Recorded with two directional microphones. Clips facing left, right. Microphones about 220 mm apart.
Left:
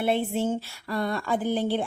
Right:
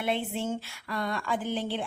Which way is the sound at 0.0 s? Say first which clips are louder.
Left 5 dB; 40° left (ahead or behind).